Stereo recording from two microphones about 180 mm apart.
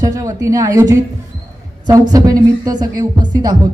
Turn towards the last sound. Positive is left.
turn(degrees=-20)  # may be behind; listen again after turning